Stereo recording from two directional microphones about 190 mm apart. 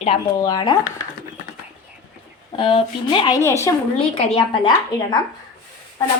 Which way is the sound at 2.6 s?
25° left (ahead or behind).